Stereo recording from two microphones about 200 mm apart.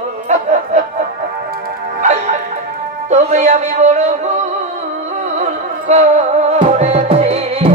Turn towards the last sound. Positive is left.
turn(degrees=-30)  # may be behind; listen again after turning